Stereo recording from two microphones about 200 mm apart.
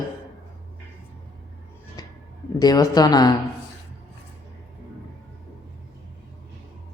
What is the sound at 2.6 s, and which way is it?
Speech, 20° left (ahead or behind).